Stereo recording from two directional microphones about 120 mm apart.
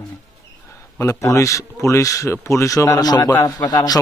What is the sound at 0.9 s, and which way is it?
A man's voice, 25° left (ahead or behind).